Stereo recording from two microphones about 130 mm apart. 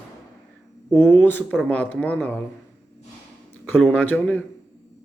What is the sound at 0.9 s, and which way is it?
Speech, 15° left (ahead or behind).